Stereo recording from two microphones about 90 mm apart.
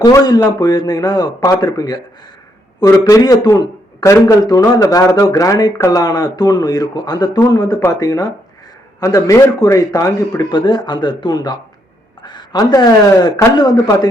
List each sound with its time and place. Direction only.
0.1 s a man's voice: 45° left (ahead or behind)
10.5 s speech: 55° left (ahead or behind)